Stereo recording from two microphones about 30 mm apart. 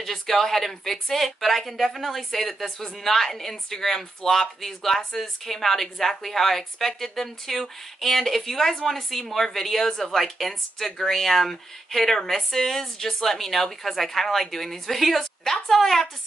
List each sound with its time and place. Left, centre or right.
0.0 s a woman's voice: centre